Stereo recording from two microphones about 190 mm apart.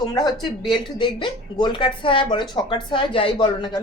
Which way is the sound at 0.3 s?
Centre (ahead or behind).